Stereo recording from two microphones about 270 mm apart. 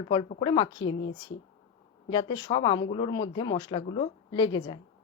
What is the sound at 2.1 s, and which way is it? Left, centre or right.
Speech, centre.